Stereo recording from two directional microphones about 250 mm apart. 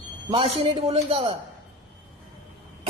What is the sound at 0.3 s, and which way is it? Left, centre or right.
A man's voice, right.